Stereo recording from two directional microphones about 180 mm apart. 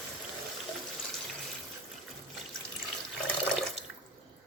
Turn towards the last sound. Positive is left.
turn(degrees=5)  # may be behind; listen again after turning